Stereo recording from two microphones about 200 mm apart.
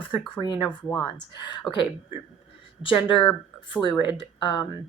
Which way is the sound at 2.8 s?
25° left (ahead or behind).